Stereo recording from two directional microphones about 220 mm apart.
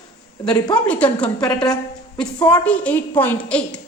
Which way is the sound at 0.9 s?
5° left (ahead or behind).